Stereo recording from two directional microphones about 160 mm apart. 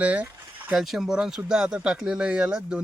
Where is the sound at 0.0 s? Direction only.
10° right (ahead or behind).